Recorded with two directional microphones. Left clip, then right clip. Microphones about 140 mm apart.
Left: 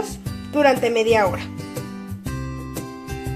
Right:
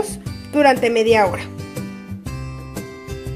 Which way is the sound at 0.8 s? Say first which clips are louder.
Right 3 dB; 20° right (ahead or behind).